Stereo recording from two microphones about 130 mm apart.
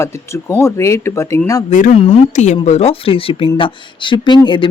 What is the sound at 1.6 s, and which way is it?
Speech, 75° left (ahead or behind).